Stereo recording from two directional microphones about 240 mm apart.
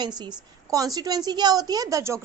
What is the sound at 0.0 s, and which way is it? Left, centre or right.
A woman's voice, centre.